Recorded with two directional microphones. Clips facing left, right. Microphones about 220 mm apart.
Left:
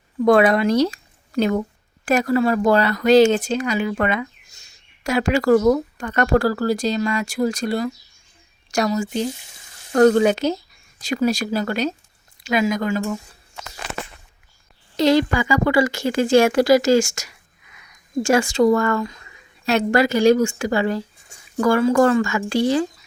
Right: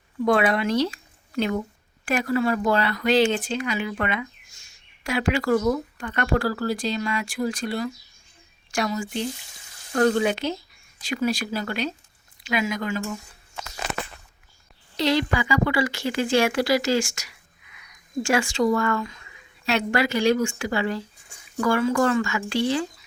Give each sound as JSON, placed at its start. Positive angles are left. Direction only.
{"t": 0.3, "sound": "speech", "side_deg": 40}
{"t": 2.0, "sound": "speech", "side_deg": 40}
{"t": 14.9, "sound": "speech", "side_deg": 45}